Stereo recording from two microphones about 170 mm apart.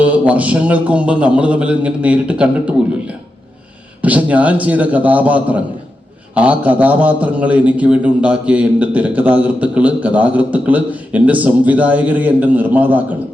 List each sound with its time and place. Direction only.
0.0 s a man's voice: 10° right (ahead or behind)